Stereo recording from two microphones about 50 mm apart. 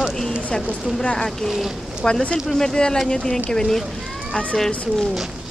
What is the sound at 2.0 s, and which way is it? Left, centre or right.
Speech, centre.